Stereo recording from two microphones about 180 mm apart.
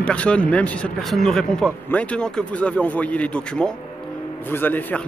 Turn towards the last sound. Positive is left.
turn(degrees=10)  # may be behind; listen again after turning